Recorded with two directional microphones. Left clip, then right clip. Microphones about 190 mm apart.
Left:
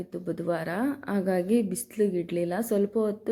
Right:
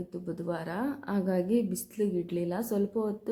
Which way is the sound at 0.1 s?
20° left (ahead or behind).